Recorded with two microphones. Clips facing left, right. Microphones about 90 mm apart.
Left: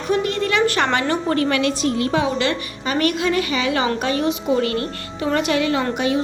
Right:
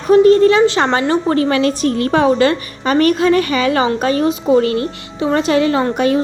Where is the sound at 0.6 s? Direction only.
20° right (ahead or behind).